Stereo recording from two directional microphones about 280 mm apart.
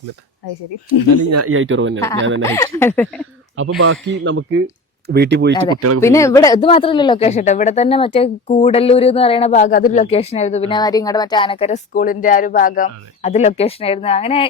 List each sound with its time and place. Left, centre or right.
1.2 s speech: right
2.4 s speech: centre
3.6 s speech: right
6.0 s speech: centre